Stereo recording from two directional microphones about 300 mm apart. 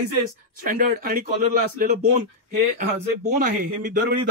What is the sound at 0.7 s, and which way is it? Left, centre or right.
Speech, right.